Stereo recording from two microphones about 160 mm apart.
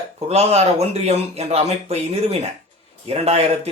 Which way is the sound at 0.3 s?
40° right (ahead or behind).